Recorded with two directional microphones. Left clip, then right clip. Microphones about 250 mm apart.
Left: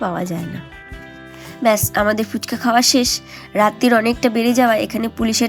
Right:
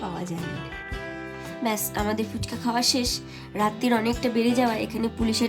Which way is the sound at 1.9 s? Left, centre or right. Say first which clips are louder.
Left 10 dB; centre.